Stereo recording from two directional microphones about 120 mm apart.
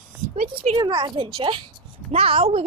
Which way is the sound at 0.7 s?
40° right (ahead or behind).